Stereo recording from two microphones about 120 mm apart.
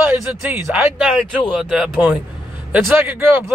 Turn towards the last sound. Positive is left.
turn(degrees=-20)  # may be behind; listen again after turning